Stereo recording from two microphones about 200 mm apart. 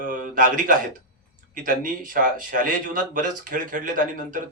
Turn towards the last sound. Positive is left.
turn(degrees=-40)  # may be behind; listen again after turning